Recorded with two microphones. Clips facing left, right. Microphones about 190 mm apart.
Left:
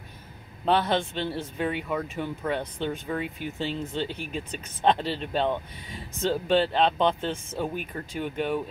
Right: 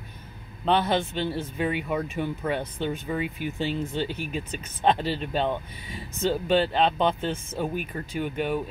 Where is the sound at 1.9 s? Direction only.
15° right (ahead or behind).